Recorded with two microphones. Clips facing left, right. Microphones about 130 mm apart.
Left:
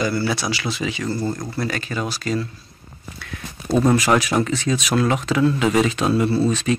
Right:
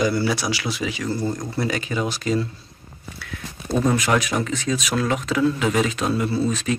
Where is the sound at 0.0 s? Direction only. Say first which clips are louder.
Right 1 dB; 15° right (ahead or behind).